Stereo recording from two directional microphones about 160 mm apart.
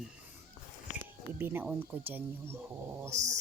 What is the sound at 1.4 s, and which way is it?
Speech, 15° right (ahead or behind).